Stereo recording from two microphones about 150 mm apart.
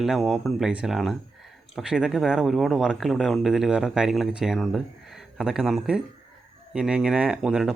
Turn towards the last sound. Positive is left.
turn(degrees=-5)  # may be behind; listen again after turning